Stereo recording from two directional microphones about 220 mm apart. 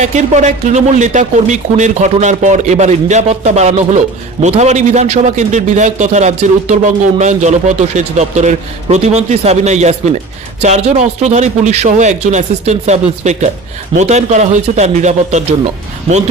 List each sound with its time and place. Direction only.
0.0 s speech: 35° right (ahead or behind)